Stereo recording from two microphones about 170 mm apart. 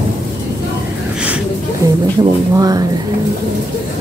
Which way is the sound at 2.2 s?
20° right (ahead or behind).